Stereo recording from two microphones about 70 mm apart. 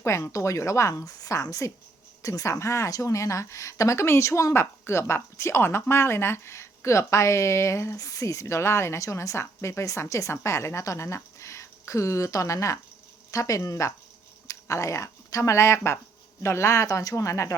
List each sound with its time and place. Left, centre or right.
0.0 s speech: left